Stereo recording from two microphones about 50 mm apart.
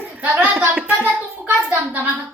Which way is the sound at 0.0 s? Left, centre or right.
Right.